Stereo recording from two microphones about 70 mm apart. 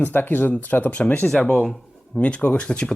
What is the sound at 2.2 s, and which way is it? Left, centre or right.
Speech, centre.